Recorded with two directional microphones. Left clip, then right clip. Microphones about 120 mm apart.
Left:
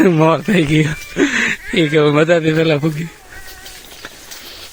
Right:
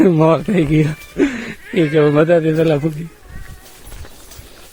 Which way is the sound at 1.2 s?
20° left (ahead or behind).